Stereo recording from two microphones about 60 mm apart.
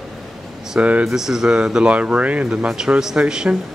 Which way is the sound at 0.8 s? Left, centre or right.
Right.